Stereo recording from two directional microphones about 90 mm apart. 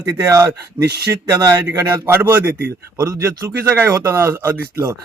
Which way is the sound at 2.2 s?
20° right (ahead or behind).